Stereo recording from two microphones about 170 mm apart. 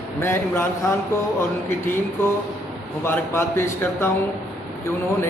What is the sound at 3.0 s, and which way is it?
Speech, 15° left (ahead or behind).